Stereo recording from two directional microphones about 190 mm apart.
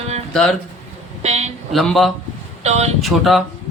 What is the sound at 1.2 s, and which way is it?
Speech, 35° right (ahead or behind).